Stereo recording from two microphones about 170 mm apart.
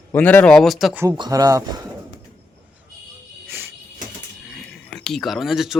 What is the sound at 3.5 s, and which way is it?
Cricket, 15° right (ahead or behind).